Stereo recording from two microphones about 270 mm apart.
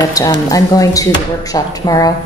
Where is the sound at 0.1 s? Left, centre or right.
Centre.